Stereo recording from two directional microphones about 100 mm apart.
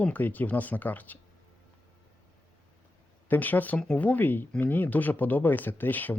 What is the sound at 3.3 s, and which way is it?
Speech, 15° left (ahead or behind).